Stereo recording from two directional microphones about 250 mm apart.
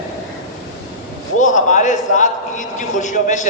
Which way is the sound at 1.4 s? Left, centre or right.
Left.